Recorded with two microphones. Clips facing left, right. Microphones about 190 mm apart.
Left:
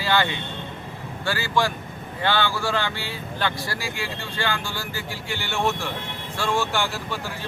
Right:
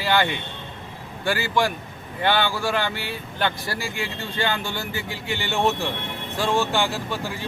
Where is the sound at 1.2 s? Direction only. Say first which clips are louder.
Right 2 dB; 15° right (ahead or behind).